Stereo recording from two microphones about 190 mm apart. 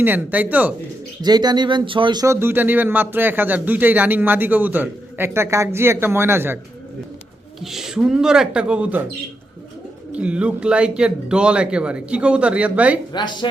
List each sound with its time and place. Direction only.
0.0 s speech: 10° right (ahead or behind)
1.2 s speech: 20° right (ahead or behind)
7.6 s speech: centre (ahead or behind)
10.1 s speech: 5° right (ahead or behind)
13.1 s speech: 25° left (ahead or behind)